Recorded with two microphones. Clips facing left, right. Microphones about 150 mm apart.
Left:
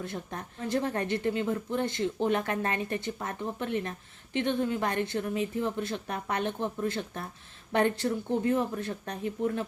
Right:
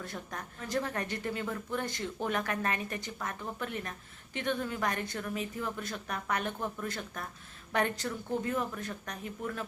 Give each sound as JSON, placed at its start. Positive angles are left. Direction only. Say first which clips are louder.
{"t": 0.0, "sound": "a woman's voice", "louder": "left 4 dB", "side_deg": 25}